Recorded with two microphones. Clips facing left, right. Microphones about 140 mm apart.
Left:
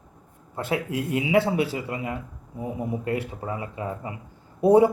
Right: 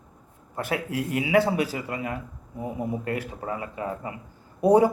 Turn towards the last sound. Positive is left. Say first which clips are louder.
# left 1 dB
turn(degrees=-20)  # may be behind; listen again after turning